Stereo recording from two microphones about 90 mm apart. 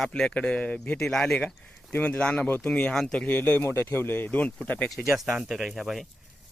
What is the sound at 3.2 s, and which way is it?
Speech, 20° left (ahead or behind).